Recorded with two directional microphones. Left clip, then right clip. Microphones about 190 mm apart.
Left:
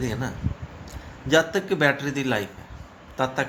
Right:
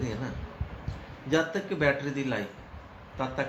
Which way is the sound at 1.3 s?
60° left (ahead or behind).